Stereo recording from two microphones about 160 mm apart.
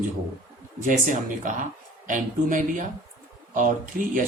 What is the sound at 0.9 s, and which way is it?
A man's voice, 55° right (ahead or behind).